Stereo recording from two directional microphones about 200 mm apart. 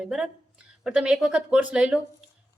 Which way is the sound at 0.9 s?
5° right (ahead or behind).